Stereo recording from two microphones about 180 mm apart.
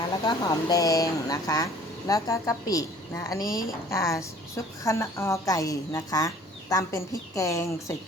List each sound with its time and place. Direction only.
0.3 s speech: 20° left (ahead or behind)
3.4 s speech: 50° left (ahead or behind)
3.8 s a woman's voice: 15° left (ahead or behind)